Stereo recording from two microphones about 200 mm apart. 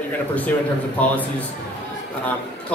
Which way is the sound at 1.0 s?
5° left (ahead or behind).